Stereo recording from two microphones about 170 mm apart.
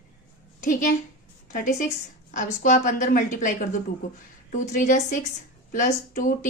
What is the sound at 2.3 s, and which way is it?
A woman's voice, 50° left (ahead or behind).